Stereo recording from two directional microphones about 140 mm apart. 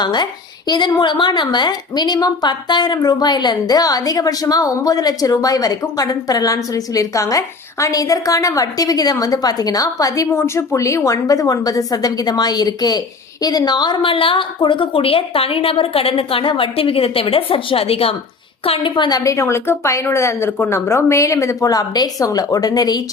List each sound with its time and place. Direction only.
0.0 s a woman's voice: 30° left (ahead or behind)